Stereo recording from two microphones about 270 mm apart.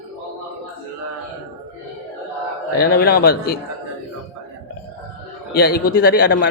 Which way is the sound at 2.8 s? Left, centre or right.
Left.